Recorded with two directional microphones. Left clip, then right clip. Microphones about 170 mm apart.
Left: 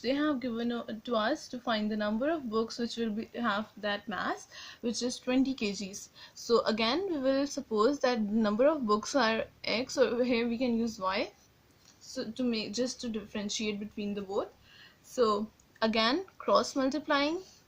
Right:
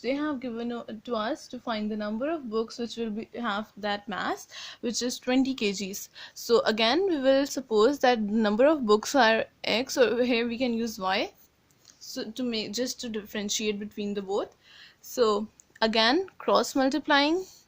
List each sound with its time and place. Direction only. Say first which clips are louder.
0.0 s speech: right 1 dB; 30° right (ahead or behind)
3.3 s speech: right 1 dB; 40° right (ahead or behind)